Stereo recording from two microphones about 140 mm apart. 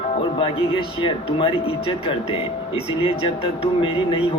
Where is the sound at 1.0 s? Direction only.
40° left (ahead or behind).